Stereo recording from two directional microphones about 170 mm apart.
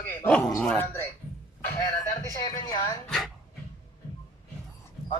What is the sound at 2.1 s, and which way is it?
Speech, 20° left (ahead or behind).